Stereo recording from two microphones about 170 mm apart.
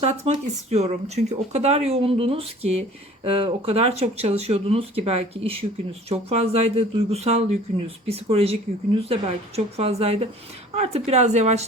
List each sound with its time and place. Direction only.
0.7 s speech: 40° right (ahead or behind)